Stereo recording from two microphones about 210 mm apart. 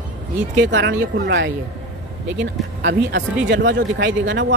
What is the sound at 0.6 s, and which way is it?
Speech, 55° right (ahead or behind).